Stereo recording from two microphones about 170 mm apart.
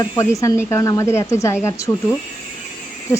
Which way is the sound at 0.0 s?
20° left (ahead or behind).